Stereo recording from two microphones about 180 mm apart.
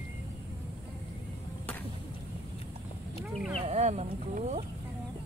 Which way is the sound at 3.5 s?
35° right (ahead or behind).